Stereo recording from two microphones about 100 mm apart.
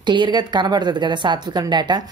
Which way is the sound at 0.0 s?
50° right (ahead or behind).